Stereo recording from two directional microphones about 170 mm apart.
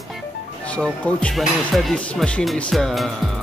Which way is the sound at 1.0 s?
5° left (ahead or behind).